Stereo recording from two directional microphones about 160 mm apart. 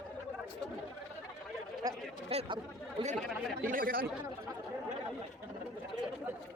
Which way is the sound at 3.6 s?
60° right (ahead or behind).